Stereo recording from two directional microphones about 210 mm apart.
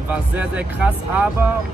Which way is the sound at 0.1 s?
5° right (ahead or behind).